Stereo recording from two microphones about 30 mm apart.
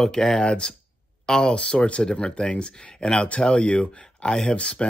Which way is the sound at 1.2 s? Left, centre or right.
Left.